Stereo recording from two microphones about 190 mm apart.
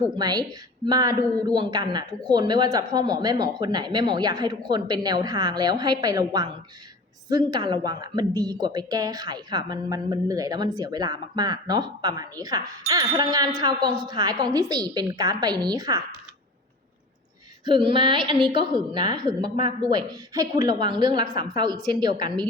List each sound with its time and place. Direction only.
0.1 s a woman's voice: 20° right (ahead or behind)
17.7 s a woman's voice: 25° right (ahead or behind)